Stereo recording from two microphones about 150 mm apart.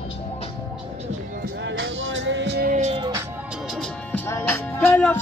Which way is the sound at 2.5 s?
85° right.